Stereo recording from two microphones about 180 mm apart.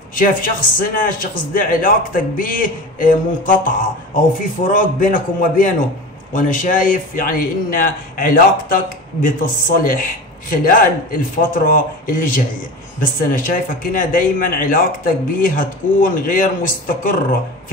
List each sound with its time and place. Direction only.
0.1 s a man's voice: 50° left (ahead or behind)